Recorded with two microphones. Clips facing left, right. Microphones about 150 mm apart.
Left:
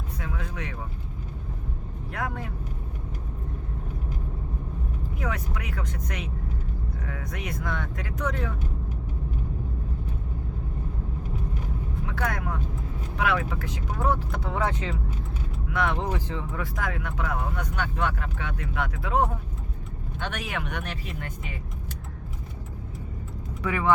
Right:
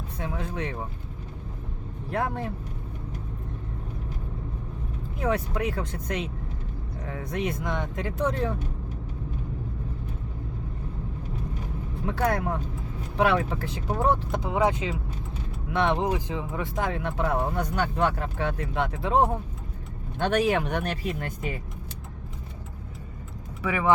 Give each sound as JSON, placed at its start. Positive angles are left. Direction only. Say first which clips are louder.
{"t": 0.2, "sound": "speech", "louder": "right 5 dB", "side_deg": -30}
{"t": 2.0, "sound": "speech", "louder": "right 4 dB", "side_deg": -30}
{"t": 5.2, "sound": "speech", "louder": "right 8 dB", "side_deg": -30}
{"t": 12.0, "sound": "speech", "louder": "right 6 dB", "side_deg": -30}
{"t": 15.7, "sound": "speech", "louder": "right 3 dB", "side_deg": -25}
{"t": 23.6, "sound": "speech", "louder": "right 1 dB", "side_deg": -10}